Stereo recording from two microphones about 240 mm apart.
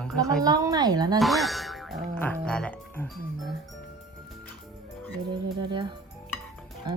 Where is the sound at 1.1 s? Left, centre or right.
Centre.